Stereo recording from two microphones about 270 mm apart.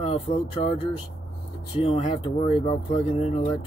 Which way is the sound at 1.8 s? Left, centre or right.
Left.